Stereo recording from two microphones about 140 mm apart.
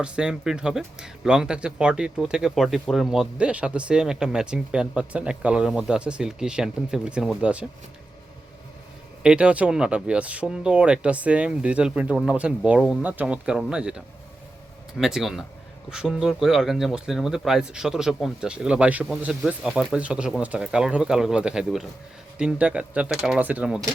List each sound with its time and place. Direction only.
0.0 s speech: 5° right (ahead or behind)
9.2 s speech: 5° right (ahead or behind)